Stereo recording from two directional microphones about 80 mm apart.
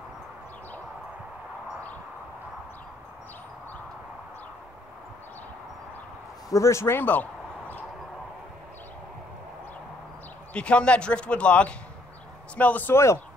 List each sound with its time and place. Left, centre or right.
6.5 s speech: left
10.5 s a man's voice: centre
12.9 s speech: left